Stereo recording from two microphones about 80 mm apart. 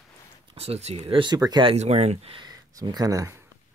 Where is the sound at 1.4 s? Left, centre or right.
Right.